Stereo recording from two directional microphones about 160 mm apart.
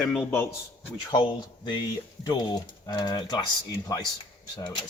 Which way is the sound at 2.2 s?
25° left (ahead or behind).